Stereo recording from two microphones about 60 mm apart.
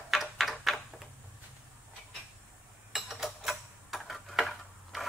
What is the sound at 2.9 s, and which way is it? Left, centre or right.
Tick-tock, centre.